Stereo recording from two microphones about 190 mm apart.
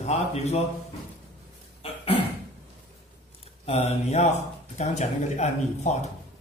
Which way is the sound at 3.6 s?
30° left (ahead or behind).